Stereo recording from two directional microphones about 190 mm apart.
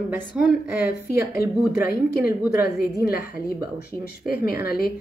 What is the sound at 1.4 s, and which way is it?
Speech, 55° left (ahead or behind).